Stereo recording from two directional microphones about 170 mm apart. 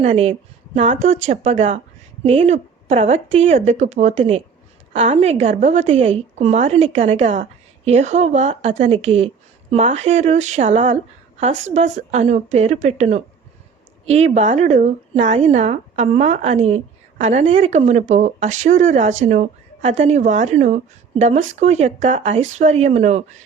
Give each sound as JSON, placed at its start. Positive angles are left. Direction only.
{"t": 0.0, "sound": "speech", "side_deg": -40}